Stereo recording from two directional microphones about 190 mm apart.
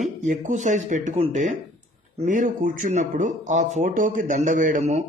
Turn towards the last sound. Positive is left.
turn(degrees=-40)  # may be behind; listen again after turning